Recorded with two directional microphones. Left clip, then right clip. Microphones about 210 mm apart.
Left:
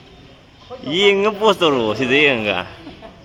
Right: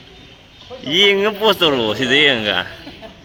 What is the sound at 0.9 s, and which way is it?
Speech, 10° left (ahead or behind).